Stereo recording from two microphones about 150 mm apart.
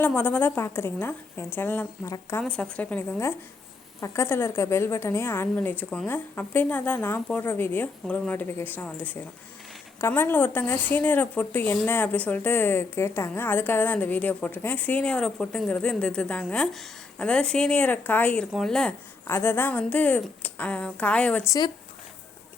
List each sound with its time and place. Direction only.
0.0 s speech: 15° left (ahead or behind)
19.3 s speech: 15° left (ahead or behind)
21.4 s speech: 25° left (ahead or behind)